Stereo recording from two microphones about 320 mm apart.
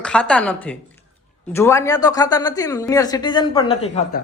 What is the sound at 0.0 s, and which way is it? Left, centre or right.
Speech, centre.